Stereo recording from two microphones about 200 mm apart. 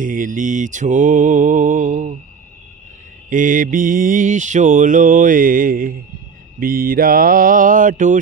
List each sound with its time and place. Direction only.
0.0 s mantra: 40° right (ahead or behind)
3.3 s mantra: 40° right (ahead or behind)